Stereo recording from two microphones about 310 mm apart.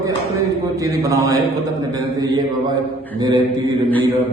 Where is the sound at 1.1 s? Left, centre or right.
Centre.